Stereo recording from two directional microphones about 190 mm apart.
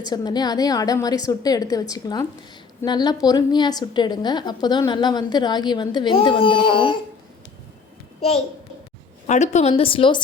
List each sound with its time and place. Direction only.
0.0 s a woman's voice: 20° left (ahead or behind)
9.2 s a woman's voice: 35° left (ahead or behind)